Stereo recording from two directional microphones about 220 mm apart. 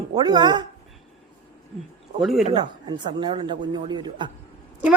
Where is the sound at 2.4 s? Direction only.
20° right (ahead or behind).